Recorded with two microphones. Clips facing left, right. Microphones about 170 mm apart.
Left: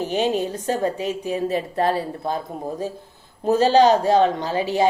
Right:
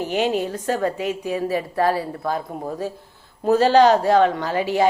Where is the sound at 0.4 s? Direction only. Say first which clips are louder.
Even; 20° left (ahead or behind).